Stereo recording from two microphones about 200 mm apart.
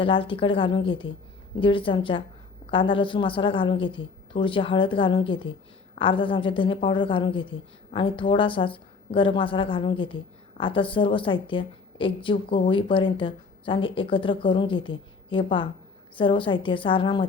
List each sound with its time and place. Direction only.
0.0 s a woman's voice: 25° left (ahead or behind)